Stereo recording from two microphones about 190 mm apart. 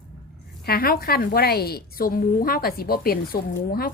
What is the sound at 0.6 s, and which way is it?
A woman's voice, 55° left (ahead or behind).